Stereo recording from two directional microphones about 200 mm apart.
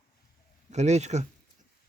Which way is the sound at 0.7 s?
35° right (ahead or behind).